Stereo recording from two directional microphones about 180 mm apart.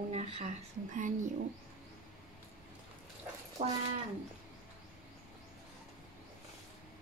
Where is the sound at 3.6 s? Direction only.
35° right (ahead or behind).